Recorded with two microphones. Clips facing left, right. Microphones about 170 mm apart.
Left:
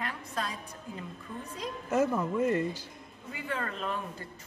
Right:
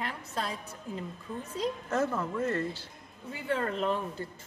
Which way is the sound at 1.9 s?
15° left (ahead or behind).